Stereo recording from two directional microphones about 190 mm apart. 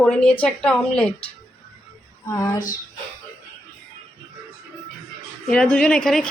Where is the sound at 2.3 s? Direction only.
15° left (ahead or behind).